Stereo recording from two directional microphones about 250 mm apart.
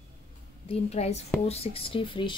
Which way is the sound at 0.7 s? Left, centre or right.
Left.